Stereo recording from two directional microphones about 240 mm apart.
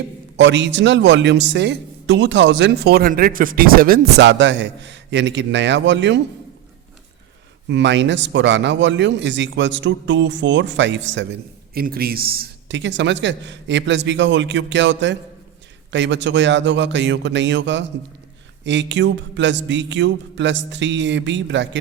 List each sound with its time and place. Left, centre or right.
0.3 s a man's voice: right
7.7 s a man's voice: right